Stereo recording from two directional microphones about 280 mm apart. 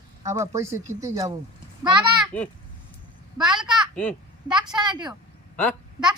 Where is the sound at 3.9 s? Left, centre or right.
Centre.